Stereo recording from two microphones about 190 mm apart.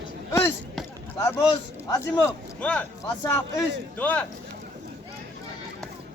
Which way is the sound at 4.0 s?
10° left (ahead or behind).